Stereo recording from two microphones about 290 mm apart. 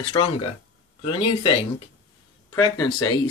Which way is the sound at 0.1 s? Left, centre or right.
Centre.